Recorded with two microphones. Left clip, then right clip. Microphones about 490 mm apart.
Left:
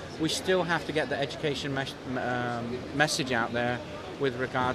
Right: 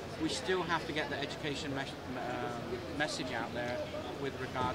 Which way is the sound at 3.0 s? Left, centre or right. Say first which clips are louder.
Left 11 dB; left.